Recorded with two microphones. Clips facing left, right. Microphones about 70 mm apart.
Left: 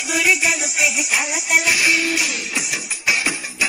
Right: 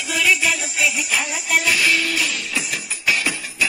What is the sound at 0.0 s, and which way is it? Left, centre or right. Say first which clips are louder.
Music: left 1 dB; centre.